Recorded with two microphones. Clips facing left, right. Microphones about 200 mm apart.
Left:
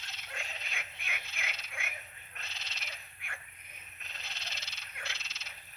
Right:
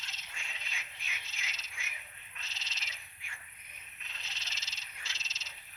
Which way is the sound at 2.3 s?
60° left (ahead or behind).